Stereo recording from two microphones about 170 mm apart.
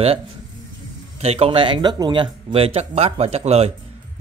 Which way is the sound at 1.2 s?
35° right (ahead or behind).